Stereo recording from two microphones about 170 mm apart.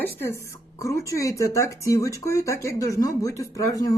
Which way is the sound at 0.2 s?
15° left (ahead or behind).